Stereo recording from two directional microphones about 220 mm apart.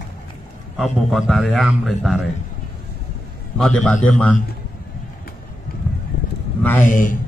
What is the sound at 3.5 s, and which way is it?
Speech, 5° left (ahead or behind).